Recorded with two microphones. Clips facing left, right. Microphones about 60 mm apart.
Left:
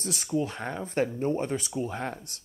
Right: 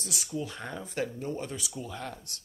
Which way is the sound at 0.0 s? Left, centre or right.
Left.